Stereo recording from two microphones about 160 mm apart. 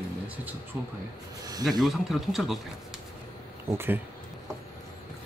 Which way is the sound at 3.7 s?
15° right (ahead or behind).